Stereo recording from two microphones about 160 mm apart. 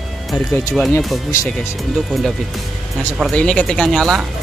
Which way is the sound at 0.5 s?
15° left (ahead or behind).